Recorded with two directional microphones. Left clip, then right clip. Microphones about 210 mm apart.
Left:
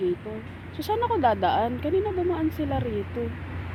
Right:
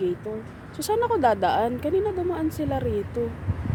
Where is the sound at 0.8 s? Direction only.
5° right (ahead or behind).